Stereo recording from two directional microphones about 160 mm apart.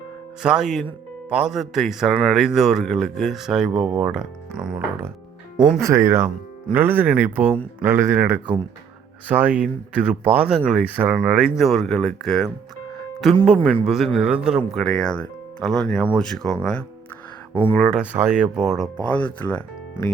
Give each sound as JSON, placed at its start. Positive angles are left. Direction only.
{"t": 0.4, "sound": "speech", "side_deg": -5}
{"t": 5.8, "sound": "speech", "side_deg": -15}
{"t": 19.1, "sound": "speech", "side_deg": 10}